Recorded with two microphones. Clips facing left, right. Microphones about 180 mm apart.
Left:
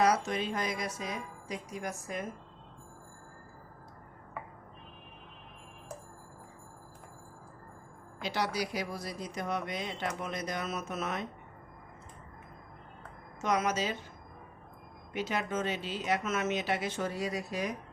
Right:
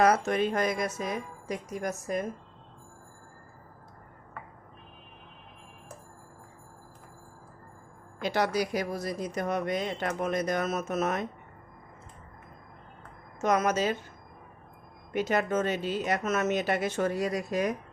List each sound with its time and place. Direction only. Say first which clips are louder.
0.0 s speech: right 4 dB; 55° right (ahead or behind)
8.2 s speech: right 6 dB; 50° right (ahead or behind)
13.4 s speech: right 5 dB; 45° right (ahead or behind)
15.1 s speech: right 6 dB; 45° right (ahead or behind)